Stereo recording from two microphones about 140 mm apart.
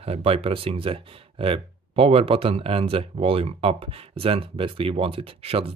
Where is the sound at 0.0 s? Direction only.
45° right (ahead or behind).